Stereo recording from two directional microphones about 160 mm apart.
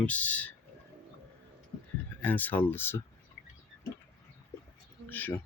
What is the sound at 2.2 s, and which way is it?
Speech, 10° left (ahead or behind).